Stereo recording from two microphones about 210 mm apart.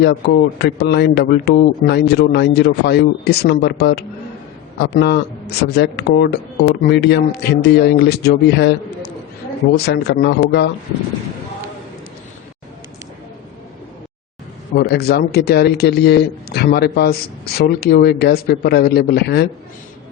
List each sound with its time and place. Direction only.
0.6 s a man's voice: 50° left (ahead or behind)
14.8 s a man's voice: 50° left (ahead or behind)